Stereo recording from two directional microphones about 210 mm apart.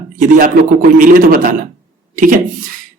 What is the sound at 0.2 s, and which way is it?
Speech, 40° right (ahead or behind).